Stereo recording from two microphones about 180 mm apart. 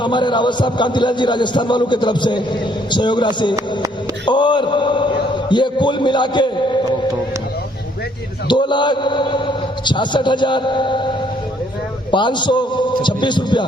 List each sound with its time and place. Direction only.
0.0 s a man's voice: 25° left (ahead or behind)
8.4 s a man's voice: 25° left (ahead or behind)
12.1 s a man's voice: 25° left (ahead or behind)